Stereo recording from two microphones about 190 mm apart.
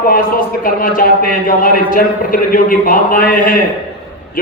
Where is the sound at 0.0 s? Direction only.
50° left (ahead or behind).